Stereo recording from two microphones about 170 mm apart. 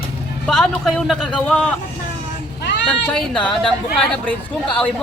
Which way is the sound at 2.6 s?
90° left.